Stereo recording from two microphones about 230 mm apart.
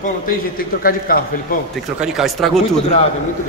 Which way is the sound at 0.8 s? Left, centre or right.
Left.